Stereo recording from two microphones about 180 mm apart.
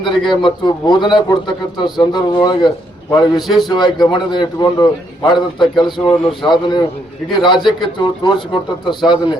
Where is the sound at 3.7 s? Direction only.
25° left (ahead or behind).